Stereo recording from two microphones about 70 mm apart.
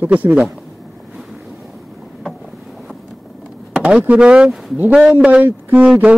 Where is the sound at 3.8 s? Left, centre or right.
Centre.